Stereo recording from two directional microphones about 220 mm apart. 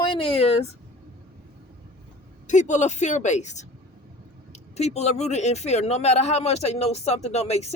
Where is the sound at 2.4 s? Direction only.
35° left (ahead or behind).